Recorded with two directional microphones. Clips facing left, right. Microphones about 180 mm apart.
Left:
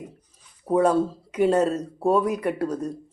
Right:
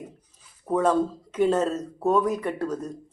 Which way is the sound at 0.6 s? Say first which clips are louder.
Left 2 dB; 10° left (ahead or behind).